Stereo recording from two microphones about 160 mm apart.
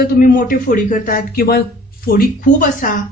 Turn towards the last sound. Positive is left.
turn(degrees=55)  # may be behind; listen again after turning